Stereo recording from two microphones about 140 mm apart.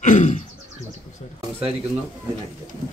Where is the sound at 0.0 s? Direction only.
60° left (ahead or behind).